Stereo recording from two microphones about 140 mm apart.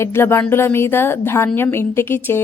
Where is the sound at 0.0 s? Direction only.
15° left (ahead or behind).